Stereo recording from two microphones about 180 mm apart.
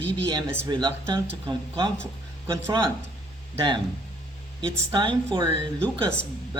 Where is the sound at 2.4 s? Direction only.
20° right (ahead or behind).